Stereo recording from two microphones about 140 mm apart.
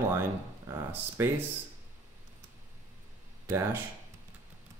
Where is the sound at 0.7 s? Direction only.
20° right (ahead or behind).